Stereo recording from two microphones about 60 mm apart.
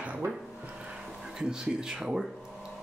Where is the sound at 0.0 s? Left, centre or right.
Right.